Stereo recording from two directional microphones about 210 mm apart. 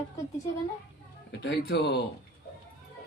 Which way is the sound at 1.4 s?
55° left (ahead or behind).